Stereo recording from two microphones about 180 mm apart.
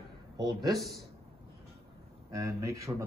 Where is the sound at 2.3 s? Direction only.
15° right (ahead or behind).